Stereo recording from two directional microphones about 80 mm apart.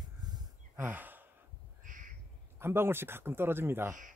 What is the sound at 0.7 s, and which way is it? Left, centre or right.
Sigh, right.